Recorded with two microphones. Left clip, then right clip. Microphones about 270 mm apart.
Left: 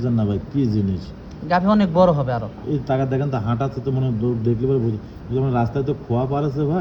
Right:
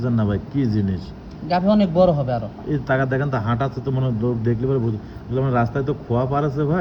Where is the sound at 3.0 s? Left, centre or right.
Centre.